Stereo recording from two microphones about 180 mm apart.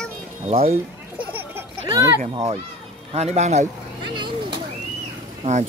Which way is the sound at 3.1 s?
40° right (ahead or behind).